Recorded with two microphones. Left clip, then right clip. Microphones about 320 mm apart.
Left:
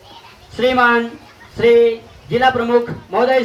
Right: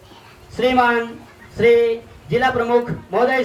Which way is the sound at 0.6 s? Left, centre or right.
Left.